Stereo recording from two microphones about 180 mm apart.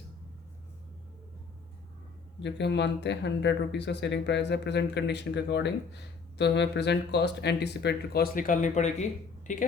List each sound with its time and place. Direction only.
2.4 s speech: 75° left (ahead or behind); by 9.6 s 45° left (ahead or behind)